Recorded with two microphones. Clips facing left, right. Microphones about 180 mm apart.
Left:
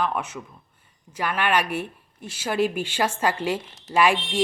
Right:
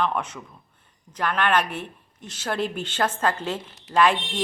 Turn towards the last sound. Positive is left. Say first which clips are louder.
# even
turn(degrees=10)  # may be behind; listen again after turning